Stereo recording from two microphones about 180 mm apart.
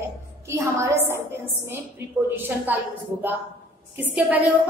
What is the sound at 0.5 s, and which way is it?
Speech, 15° right (ahead or behind).